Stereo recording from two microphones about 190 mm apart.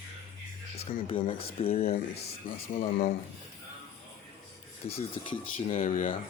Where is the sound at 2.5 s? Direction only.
45° left (ahead or behind).